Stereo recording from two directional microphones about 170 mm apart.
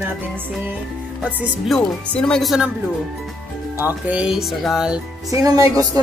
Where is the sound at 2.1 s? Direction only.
5° left (ahead or behind).